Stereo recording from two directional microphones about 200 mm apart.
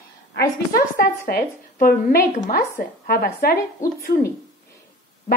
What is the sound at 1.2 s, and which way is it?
A woman's voice, 45° left (ahead or behind).